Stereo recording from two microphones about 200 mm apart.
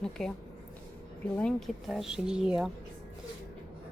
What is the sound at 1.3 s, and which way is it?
A woman's voice, 5° left (ahead or behind).